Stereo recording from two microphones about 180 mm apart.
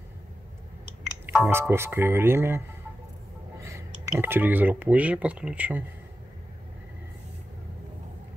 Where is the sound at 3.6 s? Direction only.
15° right (ahead or behind).